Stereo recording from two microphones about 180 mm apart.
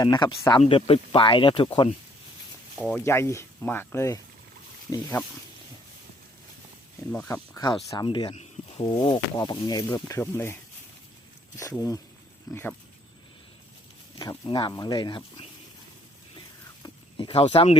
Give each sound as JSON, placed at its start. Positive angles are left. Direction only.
{"t": 0.0, "sound": "speech", "side_deg": 25}
{"t": 2.7, "sound": "speech", "side_deg": 5}
{"t": 3.0, "sound": "speech", "side_deg": 15}
{"t": 7.5, "sound": "speech", "side_deg": 20}
{"t": 12.5, "sound": "speech", "side_deg": 20}
{"t": 14.2, "sound": "speech", "side_deg": 25}
{"t": 16.8, "sound": "a sound", "side_deg": 30}